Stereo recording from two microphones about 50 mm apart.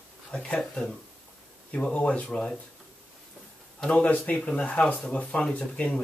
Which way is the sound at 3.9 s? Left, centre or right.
Left.